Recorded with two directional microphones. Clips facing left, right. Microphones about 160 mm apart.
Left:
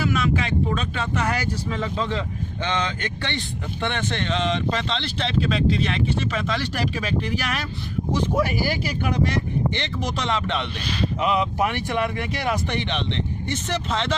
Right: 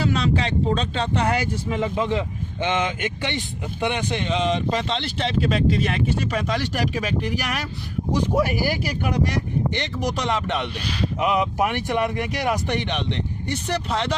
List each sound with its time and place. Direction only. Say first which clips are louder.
0.0 s speech: right 1 dB; 30° right (ahead or behind); by 4.9 s 10° right (ahead or behind)
4.9 s speech: right 1 dB; 45° right (ahead or behind)
6.7 s speech: right 1 dB; 15° right (ahead or behind)